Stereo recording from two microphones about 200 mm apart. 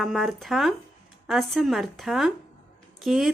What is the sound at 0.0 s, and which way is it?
Speech, centre (ahead or behind).